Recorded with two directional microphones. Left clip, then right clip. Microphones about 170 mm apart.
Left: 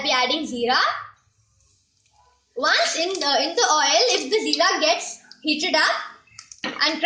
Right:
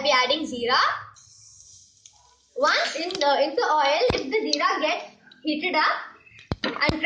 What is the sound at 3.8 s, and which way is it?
Speech, 70° left (ahead or behind).